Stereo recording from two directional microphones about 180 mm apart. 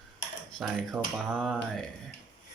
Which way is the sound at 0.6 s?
Centre (ahead or behind).